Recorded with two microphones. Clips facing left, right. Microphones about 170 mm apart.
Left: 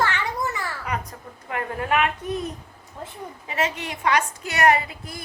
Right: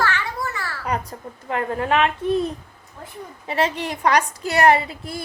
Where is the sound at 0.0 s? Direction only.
20° left (ahead or behind).